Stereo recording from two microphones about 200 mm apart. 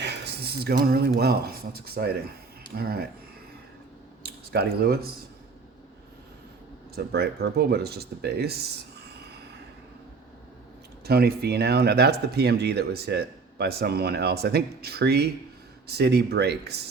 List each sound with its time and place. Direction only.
0.0 s speech: 55° right (ahead or behind)
4.2 s speech: 50° right (ahead or behind)
6.9 s speech: 55° right (ahead or behind)
9.0 s a sound: 55° right (ahead or behind)
11.0 s speech: 50° right (ahead or behind)